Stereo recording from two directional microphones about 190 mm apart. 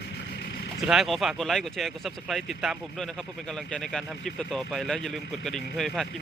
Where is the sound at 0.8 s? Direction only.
Centre (ahead or behind).